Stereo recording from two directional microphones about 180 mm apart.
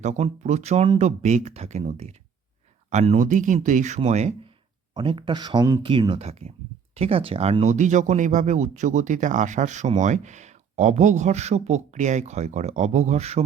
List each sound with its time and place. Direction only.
0.0 s speech: 40° right (ahead or behind)